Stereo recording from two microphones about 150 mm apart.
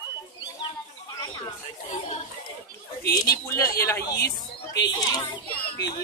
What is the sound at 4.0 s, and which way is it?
Speech, 90° left.